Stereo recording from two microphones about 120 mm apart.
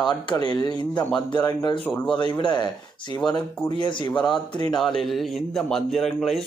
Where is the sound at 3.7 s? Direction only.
40° left (ahead or behind).